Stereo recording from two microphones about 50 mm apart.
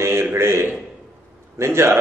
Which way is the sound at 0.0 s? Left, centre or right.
Right.